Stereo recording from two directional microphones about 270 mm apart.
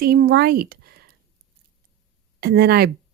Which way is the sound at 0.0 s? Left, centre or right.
Right.